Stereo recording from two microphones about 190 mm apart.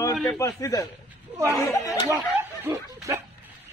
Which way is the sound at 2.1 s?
15° right (ahead or behind).